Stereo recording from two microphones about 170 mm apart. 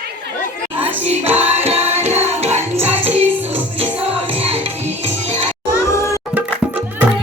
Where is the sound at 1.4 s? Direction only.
40° right (ahead or behind).